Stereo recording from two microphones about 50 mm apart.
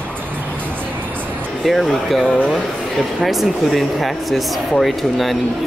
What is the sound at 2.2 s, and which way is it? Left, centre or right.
Speech, left.